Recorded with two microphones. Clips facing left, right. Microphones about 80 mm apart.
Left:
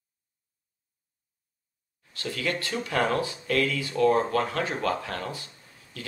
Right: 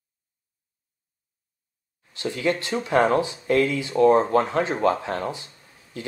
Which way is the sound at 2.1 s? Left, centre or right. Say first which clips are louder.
Right 6 dB; right.